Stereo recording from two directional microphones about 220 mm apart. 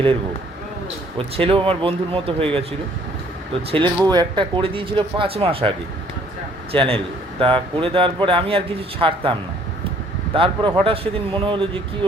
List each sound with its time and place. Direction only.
1.4 s speech: 25° right (ahead or behind)
3.7 s speech: 20° right (ahead or behind)
6.7 s speech: 25° right (ahead or behind)
10.3 s speech: 25° right (ahead or behind)